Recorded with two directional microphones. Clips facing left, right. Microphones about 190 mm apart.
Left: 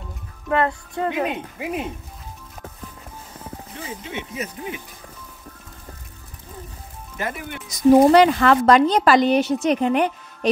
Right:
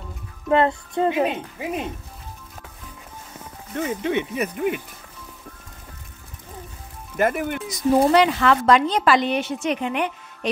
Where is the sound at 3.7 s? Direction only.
55° right (ahead or behind).